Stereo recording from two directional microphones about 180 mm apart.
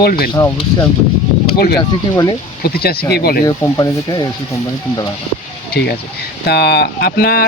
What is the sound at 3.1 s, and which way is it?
Speech, 60° left (ahead or behind).